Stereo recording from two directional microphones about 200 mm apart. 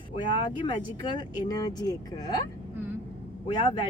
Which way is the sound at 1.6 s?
20° left (ahead or behind).